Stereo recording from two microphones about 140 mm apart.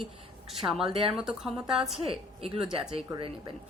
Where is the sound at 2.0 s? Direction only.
40° right (ahead or behind).